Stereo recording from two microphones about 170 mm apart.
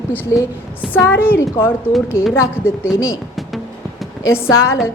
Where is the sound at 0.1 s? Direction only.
20° left (ahead or behind).